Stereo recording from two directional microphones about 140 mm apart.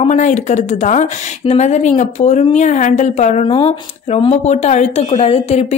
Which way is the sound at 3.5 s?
40° left (ahead or behind).